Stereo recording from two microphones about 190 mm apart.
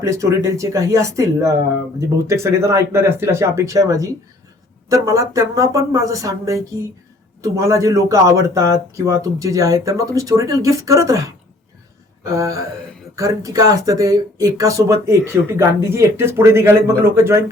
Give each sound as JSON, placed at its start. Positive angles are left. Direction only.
{"t": 0.0, "sound": "speech", "side_deg": -15}